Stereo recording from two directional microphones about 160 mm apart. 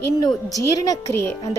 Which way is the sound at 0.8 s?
20° left (ahead or behind).